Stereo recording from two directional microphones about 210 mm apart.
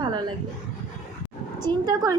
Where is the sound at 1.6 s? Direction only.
20° right (ahead or behind).